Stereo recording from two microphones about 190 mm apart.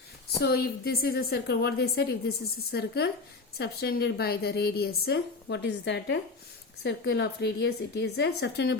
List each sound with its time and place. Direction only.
0.4 s a woman's voice: 55° left (ahead or behind)